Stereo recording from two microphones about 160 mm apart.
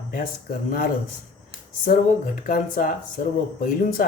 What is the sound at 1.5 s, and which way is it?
A man's voice, 60° left (ahead or behind).